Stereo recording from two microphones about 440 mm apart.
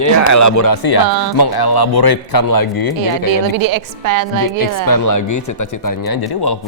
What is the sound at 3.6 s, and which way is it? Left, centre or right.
A woman's voice, right.